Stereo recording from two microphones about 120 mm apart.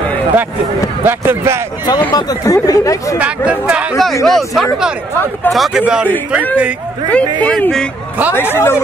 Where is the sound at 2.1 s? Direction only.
35° left (ahead or behind).